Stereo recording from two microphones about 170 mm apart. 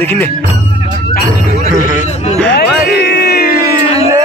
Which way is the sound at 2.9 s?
70° left (ahead or behind).